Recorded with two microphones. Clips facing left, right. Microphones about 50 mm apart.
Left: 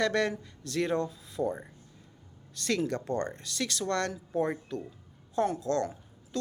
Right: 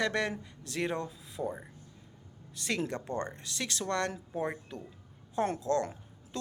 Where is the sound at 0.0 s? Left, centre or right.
Centre.